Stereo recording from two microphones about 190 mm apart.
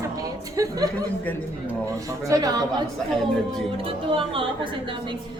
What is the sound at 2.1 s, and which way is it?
Speech, 20° right (ahead or behind).